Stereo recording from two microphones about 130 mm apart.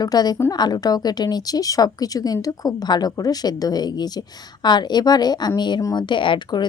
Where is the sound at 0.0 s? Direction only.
30° left (ahead or behind).